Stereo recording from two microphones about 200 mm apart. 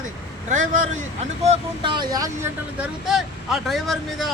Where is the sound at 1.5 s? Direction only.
25° right (ahead or behind).